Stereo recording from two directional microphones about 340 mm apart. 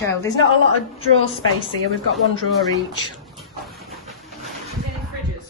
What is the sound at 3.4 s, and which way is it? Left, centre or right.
Hiss, centre.